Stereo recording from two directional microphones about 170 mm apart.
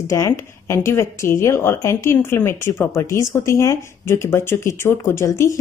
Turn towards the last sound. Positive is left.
turn(degrees=15)  # may be behind; listen again after turning